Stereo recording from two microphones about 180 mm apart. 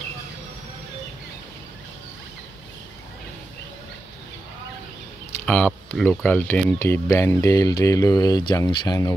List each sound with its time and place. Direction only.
5.4 s speech: 5° left (ahead or behind)